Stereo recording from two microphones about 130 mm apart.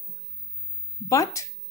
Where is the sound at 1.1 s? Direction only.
25° left (ahead or behind).